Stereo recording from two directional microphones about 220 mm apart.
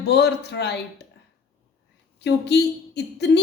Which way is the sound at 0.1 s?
50° left (ahead or behind).